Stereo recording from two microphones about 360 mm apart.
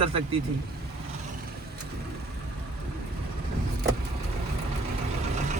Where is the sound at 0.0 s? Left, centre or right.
Centre.